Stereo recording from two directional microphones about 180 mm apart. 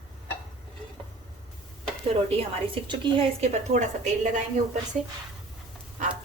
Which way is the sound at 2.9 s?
35° right (ahead or behind).